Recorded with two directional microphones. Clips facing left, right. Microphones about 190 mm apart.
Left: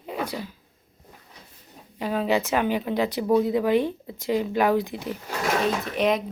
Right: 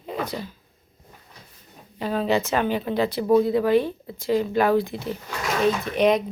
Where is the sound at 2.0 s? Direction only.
10° left (ahead or behind).